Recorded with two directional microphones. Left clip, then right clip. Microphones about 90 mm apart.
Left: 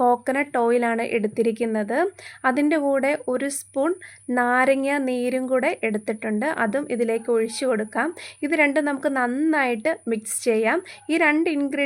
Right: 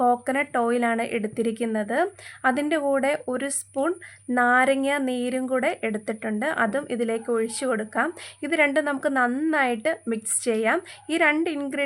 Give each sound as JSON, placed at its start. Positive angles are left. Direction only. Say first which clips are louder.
{"t": 0.0, "sound": "a woman's voice", "louder": "left 2 dB", "side_deg": 35}